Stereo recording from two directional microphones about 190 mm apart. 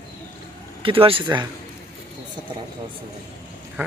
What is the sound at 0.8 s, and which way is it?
Speech, 30° right (ahead or behind).